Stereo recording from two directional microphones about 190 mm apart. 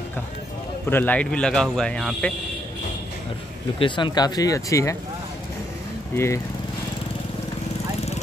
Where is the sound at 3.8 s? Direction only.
25° left (ahead or behind).